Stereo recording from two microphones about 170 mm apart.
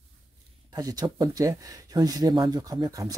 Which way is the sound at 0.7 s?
20° right (ahead or behind).